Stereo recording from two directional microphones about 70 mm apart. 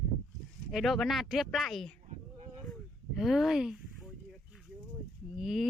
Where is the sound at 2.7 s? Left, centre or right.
Centre.